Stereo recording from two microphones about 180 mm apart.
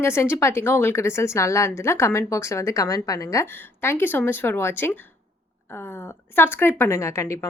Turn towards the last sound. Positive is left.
turn(degrees=15)  # may be behind; listen again after turning